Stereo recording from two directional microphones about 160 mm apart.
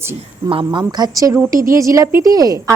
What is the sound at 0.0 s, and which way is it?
Speech, 15° right (ahead or behind).